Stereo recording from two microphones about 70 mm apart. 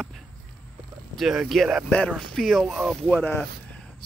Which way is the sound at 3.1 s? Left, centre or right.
Left.